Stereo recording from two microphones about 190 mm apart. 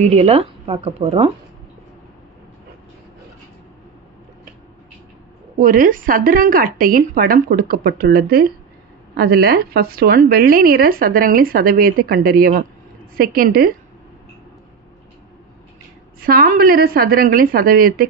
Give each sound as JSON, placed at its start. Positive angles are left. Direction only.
{"t": 0.0, "sound": "speech", "side_deg": -35}
{"t": 5.6, "sound": "a woman's voice", "side_deg": -45}
{"t": 16.2, "sound": "a woman's voice", "side_deg": -50}